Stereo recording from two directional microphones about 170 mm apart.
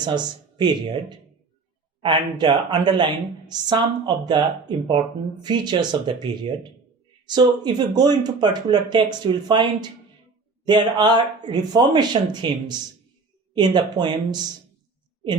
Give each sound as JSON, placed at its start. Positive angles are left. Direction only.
{"t": 0.0, "sound": "speech", "side_deg": -25}
{"t": 10.7, "sound": "speech", "side_deg": -25}